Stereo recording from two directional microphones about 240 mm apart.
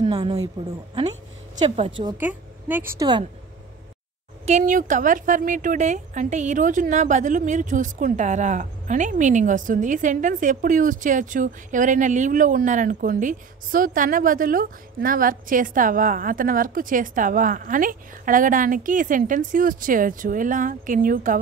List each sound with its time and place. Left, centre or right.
0.0 s speech: right
2.1 s a woman's voice: centre
4.5 s speech: right